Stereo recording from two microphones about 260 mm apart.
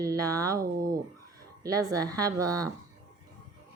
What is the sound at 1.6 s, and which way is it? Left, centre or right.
A woman's voice, centre.